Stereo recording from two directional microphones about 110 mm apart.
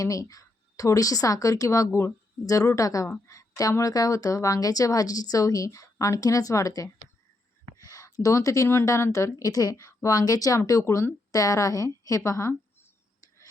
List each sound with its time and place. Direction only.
0.0 s a woman's voice: 30° left (ahead or behind)
7.8 s a sound: 30° left (ahead or behind)
8.2 s speech: 30° left (ahead or behind)